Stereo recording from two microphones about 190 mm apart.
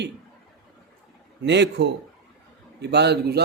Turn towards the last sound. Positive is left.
turn(degrees=-60)  # may be behind; listen again after turning